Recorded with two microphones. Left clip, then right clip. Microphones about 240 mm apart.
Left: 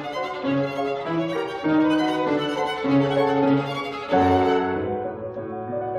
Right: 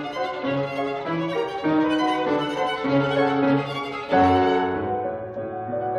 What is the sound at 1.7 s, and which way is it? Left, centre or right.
Music, right.